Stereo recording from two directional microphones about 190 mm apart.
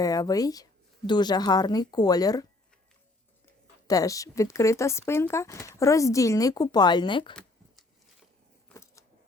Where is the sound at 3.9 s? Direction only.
20° left (ahead or behind).